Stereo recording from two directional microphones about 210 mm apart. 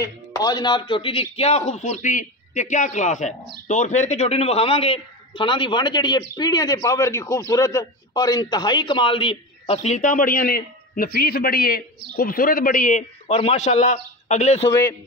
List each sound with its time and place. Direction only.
0.0 s a man's voice: 15° left (ahead or behind)
14.7 s speech: 15° left (ahead or behind)